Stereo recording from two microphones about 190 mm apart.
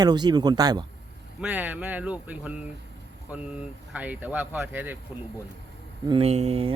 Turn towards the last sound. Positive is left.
turn(degrees=-30)  # may be behind; listen again after turning